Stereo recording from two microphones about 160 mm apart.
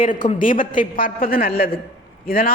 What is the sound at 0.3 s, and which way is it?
A man's voice, 55° left (ahead or behind).